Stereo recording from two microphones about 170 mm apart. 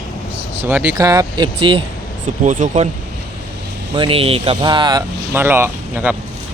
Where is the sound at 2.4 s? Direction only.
45° right (ahead or behind).